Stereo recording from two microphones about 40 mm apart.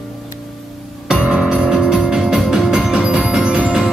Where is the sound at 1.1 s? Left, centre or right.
Centre.